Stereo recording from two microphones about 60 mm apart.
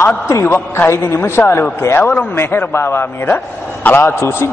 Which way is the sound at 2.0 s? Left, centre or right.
Left.